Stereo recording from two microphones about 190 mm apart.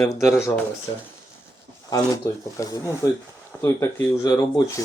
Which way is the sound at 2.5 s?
20° left (ahead or behind).